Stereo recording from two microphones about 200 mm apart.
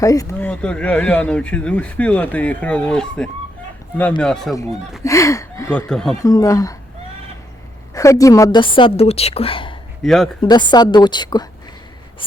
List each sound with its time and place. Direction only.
0.0 s speech: 15° left (ahead or behind)
5.0 s speech: 15° left (ahead or behind)
5.9 s speech: centre (ahead or behind)
6.2 s speech: 15° left (ahead or behind)
7.9 s a woman's voice: 15° left (ahead or behind)
10.0 s speech: centre (ahead or behind)
10.4 s a woman's voice: 20° left (ahead or behind)